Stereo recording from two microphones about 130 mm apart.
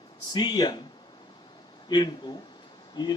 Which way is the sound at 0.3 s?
30° left (ahead or behind).